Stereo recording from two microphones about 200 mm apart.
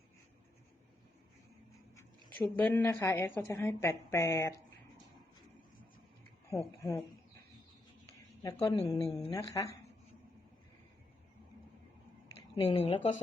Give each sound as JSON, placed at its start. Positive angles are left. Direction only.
{"t": 2.0, "sound": "a woman's voice", "side_deg": 10}
{"t": 6.5, "sound": "a woman's voice", "side_deg": 15}
{"t": 8.4, "sound": "a woman's voice", "side_deg": 15}
{"t": 12.6, "sound": "speech", "side_deg": 30}